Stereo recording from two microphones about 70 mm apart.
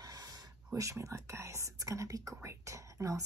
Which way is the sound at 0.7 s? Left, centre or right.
Right.